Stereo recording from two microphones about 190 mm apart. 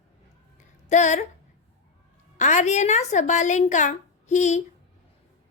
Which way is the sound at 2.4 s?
40° left (ahead or behind).